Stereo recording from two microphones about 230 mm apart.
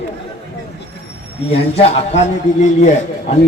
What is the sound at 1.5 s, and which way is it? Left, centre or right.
Speech, left.